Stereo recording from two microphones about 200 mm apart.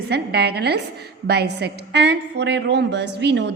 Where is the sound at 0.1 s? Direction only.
55° right (ahead or behind).